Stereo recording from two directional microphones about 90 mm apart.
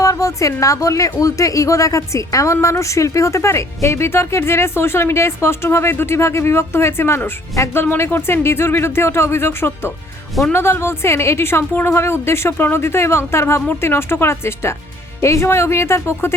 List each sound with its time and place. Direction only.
0.0 s a woman's voice: 35° left (ahead or behind)